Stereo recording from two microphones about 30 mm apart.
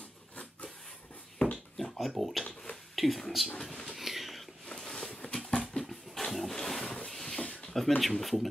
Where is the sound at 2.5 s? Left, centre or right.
Left.